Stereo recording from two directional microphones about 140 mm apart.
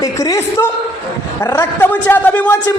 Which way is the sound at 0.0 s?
25° left (ahead or behind).